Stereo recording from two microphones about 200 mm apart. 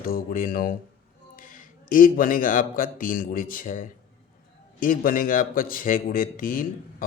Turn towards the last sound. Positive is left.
turn(degrees=45)  # may be behind; listen again after turning